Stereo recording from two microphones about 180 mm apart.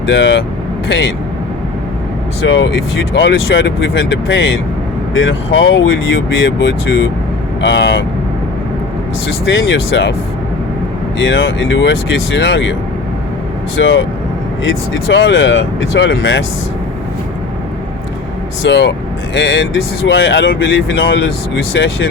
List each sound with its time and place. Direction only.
0.0 s speech: 85° left
2.5 s speech: 90° left
9.5 s speech: 90° left
11.2 s speech: 90° left
13.7 s speech: 90° left
18.6 s speech: 80° left